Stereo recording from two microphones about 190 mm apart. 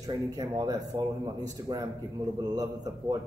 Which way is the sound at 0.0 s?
20° right (ahead or behind).